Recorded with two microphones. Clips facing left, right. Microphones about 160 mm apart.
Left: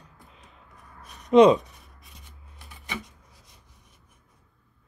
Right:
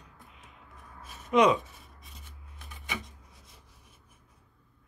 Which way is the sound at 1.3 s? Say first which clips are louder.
Left 7 dB; 30° left (ahead or behind).